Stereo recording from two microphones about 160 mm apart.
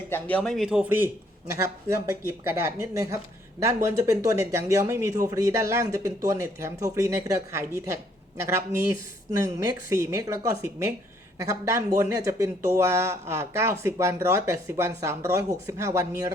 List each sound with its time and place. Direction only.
0.1 s speech: 10° left (ahead or behind); by 16.3 s 20° right (ahead or behind)